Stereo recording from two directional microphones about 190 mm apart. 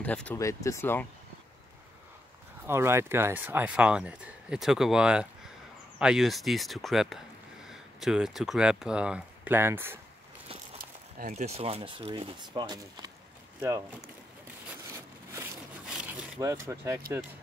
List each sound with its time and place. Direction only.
0.0 s speech: 5° left (ahead or behind)
2.6 s speech: 15° right (ahead or behind)
10.8 s speech: 50° right (ahead or behind); by 13.8 s 15° right (ahead or behind)
15.9 s wood: 5° right (ahead or behind)
16.6 s speech: 15° right (ahead or behind)